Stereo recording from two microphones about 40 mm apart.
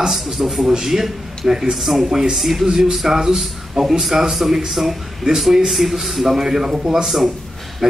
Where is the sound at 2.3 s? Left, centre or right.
Centre.